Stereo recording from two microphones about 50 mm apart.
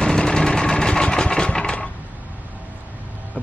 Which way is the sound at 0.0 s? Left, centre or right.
Centre.